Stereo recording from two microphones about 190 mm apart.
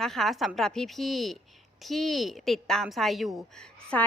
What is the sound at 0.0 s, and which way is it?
A woman's voice, centre (ahead or behind).